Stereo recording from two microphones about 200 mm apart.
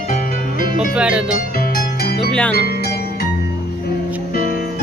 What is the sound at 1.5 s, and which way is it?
Music, 45° left (ahead or behind).